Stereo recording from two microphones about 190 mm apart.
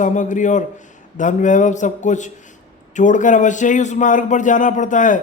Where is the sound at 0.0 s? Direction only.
40° left (ahead or behind).